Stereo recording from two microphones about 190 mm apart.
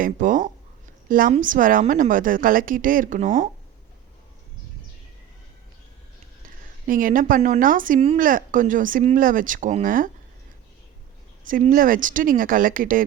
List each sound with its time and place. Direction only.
0.0 s a woman's voice: 45° right (ahead or behind)
6.8 s a woman's voice: 45° right (ahead or behind)
11.4 s a woman's voice: 45° right (ahead or behind)